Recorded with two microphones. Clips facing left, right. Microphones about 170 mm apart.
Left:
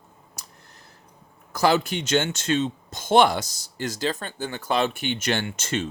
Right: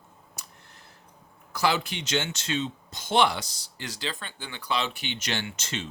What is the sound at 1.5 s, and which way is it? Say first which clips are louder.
Speech: left 6 dB; 45° left (ahead or behind).